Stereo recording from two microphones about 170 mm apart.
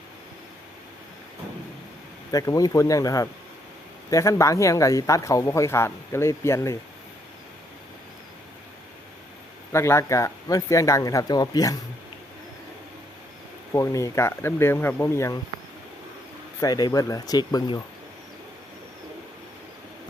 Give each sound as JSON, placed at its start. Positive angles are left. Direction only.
{"t": 2.3, "sound": "speech", "side_deg": 20}
{"t": 9.7, "sound": "speech", "side_deg": 15}
{"t": 13.7, "sound": "speech", "side_deg": 20}
{"t": 16.6, "sound": "speech", "side_deg": 20}